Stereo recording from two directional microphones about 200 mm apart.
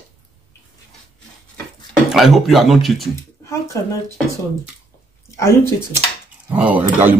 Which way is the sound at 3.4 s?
15° left (ahead or behind).